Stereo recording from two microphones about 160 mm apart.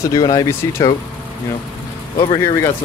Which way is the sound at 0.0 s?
25° left (ahead or behind).